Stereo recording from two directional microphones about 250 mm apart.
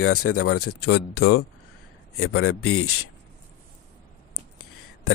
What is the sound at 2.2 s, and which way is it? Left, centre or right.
Speech, left.